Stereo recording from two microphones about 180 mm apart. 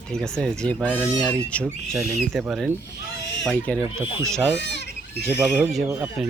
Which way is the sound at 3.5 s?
5° left (ahead or behind).